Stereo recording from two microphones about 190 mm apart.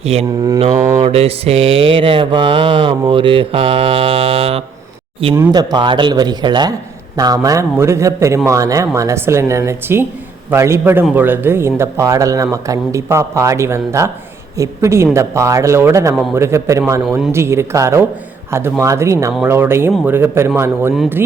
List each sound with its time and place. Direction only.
0.0 s mantra: 35° right (ahead or behind)
5.3 s mantra: 15° right (ahead or behind)
7.2 s speech: 20° right (ahead or behind)